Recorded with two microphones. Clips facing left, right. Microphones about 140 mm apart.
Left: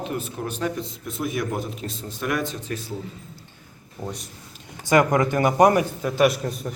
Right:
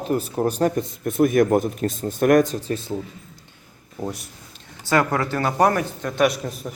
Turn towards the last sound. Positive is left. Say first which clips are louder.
# even
turn(degrees=0)  # may be behind; listen again after turning